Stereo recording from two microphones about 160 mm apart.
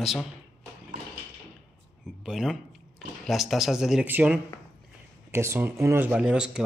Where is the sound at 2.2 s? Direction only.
Centre (ahead or behind).